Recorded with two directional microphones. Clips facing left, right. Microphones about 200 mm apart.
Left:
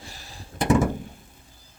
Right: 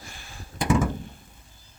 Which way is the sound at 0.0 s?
35° left (ahead or behind).